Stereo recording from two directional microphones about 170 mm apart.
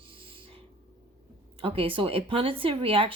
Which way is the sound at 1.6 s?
35° right (ahead or behind).